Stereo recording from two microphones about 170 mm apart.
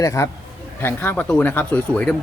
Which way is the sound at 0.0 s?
20° left (ahead or behind).